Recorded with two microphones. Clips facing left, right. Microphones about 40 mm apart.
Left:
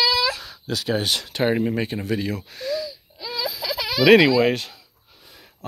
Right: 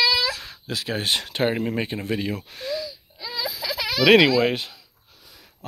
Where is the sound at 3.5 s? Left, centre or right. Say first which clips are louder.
Left 1 dB; centre.